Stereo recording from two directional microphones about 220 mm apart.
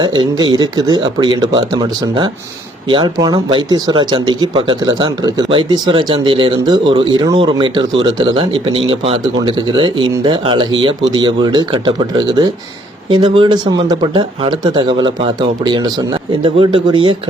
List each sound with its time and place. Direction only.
0.0 s speech: 20° right (ahead or behind)